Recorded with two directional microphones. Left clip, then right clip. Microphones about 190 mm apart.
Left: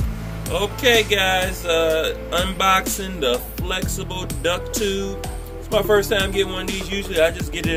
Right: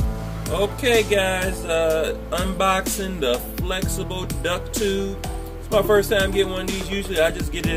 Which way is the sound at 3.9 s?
30° right (ahead or behind).